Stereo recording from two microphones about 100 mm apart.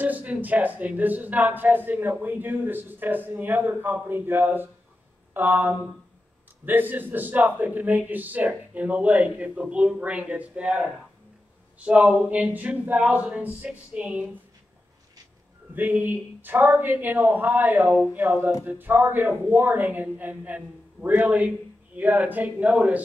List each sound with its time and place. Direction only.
0.0 s speech: 15° right (ahead or behind)
5.3 s a sound: 20° right (ahead or behind)
6.6 s speech: 20° right (ahead or behind)
15.7 s speech: 20° right (ahead or behind)